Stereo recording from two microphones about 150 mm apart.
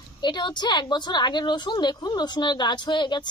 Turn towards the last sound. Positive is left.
turn(degrees=30)  # may be behind; listen again after turning